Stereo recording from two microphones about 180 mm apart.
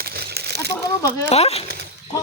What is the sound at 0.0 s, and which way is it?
Crumpling, 60° right (ahead or behind).